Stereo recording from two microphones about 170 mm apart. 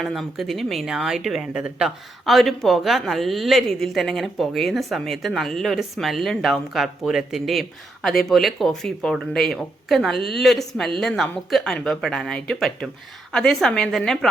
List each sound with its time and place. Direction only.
0.0 s speech: centre (ahead or behind)